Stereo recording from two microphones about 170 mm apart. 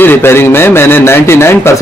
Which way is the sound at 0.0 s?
15° left (ahead or behind).